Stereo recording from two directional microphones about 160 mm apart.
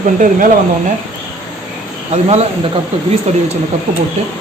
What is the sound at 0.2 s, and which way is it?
Speech, 55° right (ahead or behind).